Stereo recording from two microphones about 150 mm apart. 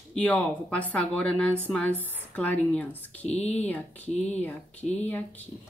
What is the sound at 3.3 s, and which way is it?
Speech, 45° left (ahead or behind).